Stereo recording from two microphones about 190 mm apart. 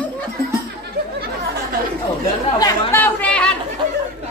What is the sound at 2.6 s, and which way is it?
Chatter, 15° left (ahead or behind).